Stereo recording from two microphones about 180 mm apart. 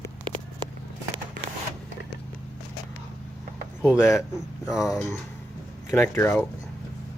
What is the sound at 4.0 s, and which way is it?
Speech, 15° left (ahead or behind).